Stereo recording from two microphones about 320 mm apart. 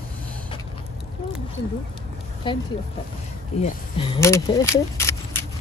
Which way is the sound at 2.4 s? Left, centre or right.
Centre.